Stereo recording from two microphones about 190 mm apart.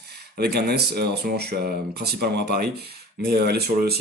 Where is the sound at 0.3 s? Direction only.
55° right (ahead or behind).